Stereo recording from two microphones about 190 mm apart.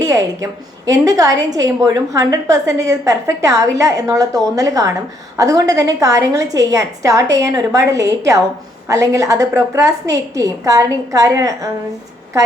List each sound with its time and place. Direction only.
0.0 s a woman's voice: 15° right (ahead or behind)